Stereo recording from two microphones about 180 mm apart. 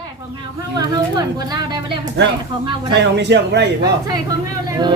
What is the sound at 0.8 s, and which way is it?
Speech, 20° right (ahead or behind).